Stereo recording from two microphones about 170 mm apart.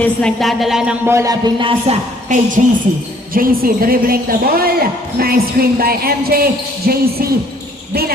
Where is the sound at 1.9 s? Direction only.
50° right (ahead or behind).